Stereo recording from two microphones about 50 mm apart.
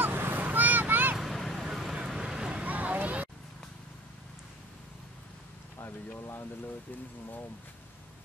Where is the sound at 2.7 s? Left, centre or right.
Right.